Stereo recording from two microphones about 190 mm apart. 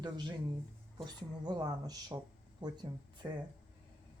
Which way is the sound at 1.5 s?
20° right (ahead or behind).